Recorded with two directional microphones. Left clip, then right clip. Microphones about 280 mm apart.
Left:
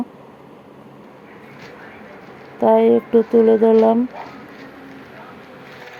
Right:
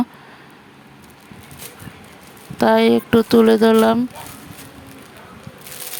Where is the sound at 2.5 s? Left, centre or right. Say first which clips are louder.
Left 1 dB; right.